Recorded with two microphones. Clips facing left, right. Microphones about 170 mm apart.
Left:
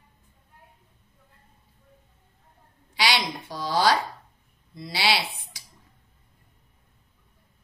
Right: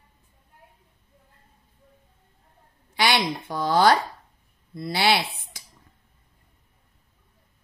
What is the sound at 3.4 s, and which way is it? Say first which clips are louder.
Speech: right 4 dB; 55° right (ahead or behind).